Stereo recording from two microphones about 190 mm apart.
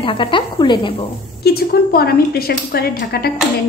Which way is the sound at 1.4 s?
55° left (ahead or behind).